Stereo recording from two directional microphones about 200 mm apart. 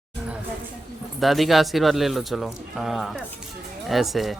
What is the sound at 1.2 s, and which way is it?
Speech, centre (ahead or behind).